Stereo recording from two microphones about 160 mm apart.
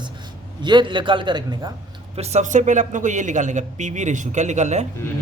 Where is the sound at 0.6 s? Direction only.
30° right (ahead or behind).